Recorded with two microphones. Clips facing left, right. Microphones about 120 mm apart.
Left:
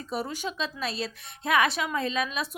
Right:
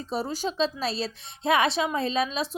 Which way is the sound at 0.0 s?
30° right (ahead or behind).